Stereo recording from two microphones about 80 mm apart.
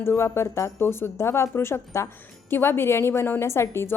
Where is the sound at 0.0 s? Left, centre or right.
Left.